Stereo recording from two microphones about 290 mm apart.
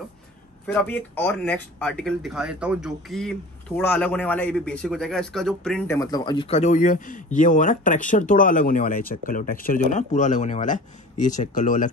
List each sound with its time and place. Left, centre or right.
0.7 s speech: centre; by 11.9 s left